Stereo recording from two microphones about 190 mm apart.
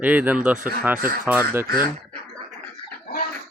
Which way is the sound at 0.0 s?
10° right (ahead or behind).